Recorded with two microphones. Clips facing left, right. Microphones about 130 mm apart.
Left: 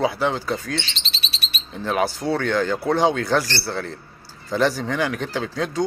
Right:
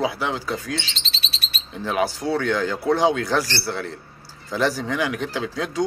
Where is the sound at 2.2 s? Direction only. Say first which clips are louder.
Left 1 dB; 10° right (ahead or behind).